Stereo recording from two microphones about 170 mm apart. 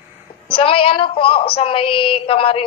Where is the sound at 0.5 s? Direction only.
30° left (ahead or behind).